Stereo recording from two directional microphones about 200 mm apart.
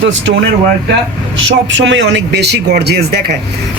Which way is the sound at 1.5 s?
65° right (ahead or behind).